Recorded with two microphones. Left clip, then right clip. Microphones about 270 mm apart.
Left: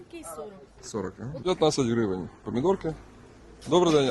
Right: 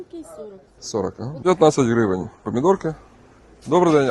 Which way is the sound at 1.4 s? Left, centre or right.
Right.